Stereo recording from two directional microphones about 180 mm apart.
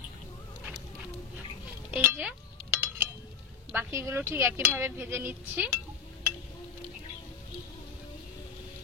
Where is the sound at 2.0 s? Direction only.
10° right (ahead or behind).